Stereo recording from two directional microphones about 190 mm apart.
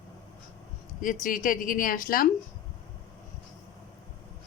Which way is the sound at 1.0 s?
45° left (ahead or behind).